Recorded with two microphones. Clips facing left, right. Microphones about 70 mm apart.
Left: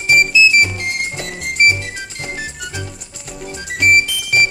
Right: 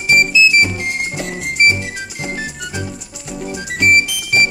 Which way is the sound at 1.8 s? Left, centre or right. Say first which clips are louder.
Right 2 dB; centre.